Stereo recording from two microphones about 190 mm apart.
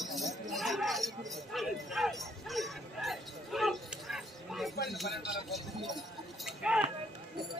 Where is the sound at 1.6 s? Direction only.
Centre (ahead or behind).